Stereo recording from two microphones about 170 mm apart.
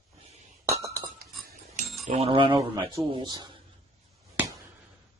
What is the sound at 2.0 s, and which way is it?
Speech, 40° right (ahead or behind).